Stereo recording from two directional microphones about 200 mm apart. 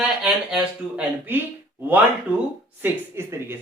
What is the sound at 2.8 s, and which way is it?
Speech, 10° right (ahead or behind).